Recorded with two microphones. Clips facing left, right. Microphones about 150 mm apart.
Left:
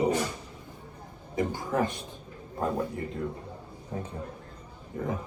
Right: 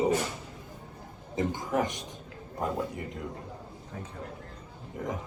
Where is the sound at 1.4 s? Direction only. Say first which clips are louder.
Left 1 dB; 15° right (ahead or behind).